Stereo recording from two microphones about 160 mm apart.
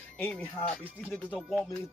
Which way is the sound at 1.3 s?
Centre (ahead or behind).